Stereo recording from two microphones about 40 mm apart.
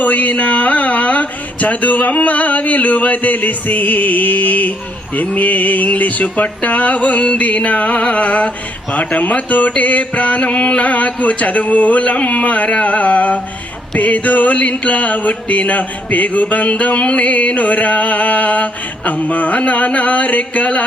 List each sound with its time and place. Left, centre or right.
0.0 s music: left